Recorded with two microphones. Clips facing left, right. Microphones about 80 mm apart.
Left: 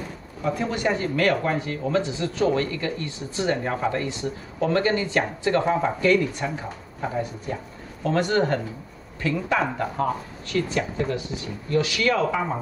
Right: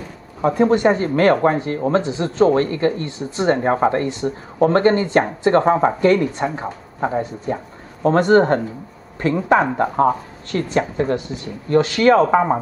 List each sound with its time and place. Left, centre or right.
0.4 s speech: right